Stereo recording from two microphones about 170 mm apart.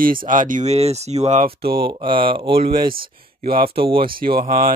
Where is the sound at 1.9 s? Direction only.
30° right (ahead or behind).